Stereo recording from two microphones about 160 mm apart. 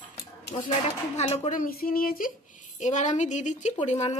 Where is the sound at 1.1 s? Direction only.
45° left (ahead or behind).